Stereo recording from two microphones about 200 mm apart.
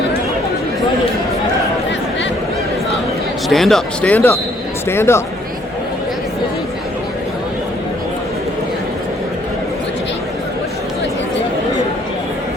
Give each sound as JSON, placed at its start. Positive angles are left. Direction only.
{"t": 3.5, "sound": "speech", "side_deg": 0}